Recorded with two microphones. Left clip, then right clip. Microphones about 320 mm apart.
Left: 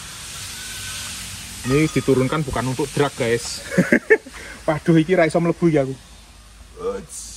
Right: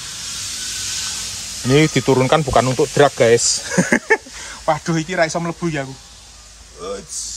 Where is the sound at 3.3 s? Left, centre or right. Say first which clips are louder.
Right 7 dB; right.